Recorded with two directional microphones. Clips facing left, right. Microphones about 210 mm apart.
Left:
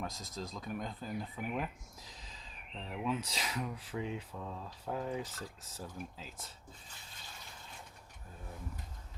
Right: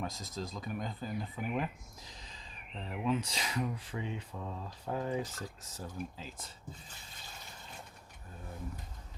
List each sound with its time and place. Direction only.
0.0 s speech: centre (ahead or behind)